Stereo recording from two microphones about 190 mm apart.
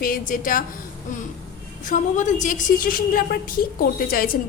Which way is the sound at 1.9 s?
40° left (ahead or behind).